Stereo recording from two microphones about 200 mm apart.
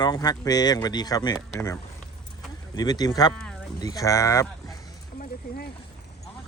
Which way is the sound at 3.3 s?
5° left (ahead or behind).